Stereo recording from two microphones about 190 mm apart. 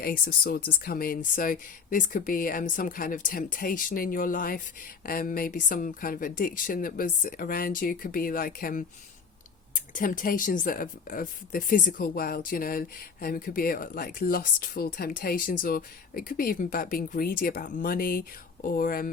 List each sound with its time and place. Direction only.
0.0 s speech: 50° left (ahead or behind)